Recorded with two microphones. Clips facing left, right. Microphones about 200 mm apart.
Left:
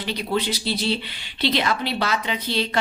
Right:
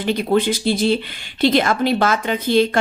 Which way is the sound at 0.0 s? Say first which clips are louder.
Right 7 dB; 50° right (ahead or behind).